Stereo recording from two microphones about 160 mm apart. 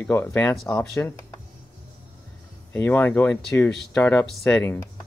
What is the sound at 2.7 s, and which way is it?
Speech, 10° left (ahead or behind).